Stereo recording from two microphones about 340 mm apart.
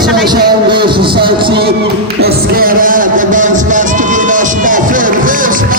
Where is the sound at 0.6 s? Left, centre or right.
Centre.